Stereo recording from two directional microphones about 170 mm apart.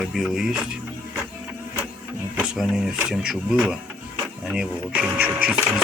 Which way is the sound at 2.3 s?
5° right (ahead or behind).